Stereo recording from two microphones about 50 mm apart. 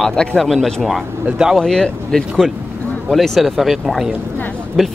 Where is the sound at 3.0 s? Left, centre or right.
Centre.